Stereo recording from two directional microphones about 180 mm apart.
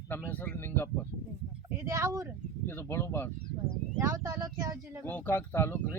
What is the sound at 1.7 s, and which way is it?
Speech, 15° right (ahead or behind).